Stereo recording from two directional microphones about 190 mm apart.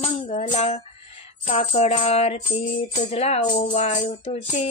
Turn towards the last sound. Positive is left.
turn(degrees=35)  # may be behind; listen again after turning